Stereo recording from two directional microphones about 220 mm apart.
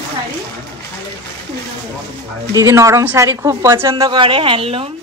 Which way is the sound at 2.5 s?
15° right (ahead or behind).